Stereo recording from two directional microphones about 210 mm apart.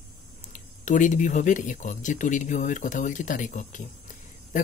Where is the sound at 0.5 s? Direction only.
35° left (ahead or behind).